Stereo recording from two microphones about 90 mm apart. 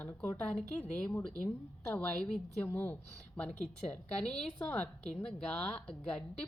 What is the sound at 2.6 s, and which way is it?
Speech, 20° left (ahead or behind).